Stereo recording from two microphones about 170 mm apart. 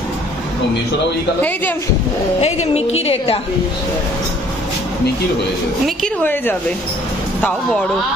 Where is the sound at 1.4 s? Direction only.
10° left (ahead or behind).